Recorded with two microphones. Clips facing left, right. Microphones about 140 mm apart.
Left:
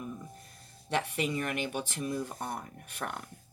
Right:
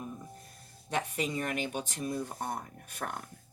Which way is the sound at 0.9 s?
60° left (ahead or behind).